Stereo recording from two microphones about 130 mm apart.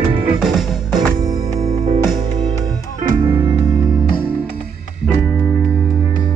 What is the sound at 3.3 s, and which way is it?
Music, 35° right (ahead or behind).